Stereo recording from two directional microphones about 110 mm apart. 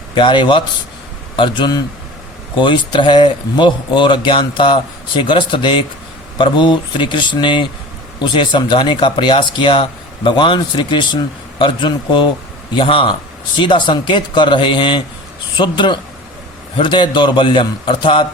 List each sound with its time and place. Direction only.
0.1 s speech: 50° left (ahead or behind)